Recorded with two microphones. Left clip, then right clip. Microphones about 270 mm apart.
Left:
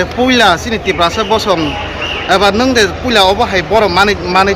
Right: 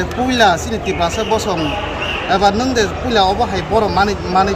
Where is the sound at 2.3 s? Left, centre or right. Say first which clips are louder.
Left 4 dB; left.